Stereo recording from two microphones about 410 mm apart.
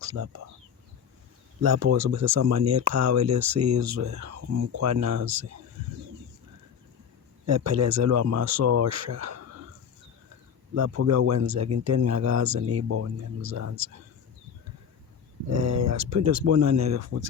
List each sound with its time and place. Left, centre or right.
0.0 s speech: right
1.6 s speech: right
7.4 s speech: right
10.8 s speech: right
15.4 s speech: right